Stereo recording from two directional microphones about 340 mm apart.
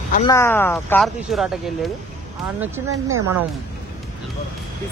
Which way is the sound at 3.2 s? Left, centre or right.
Centre.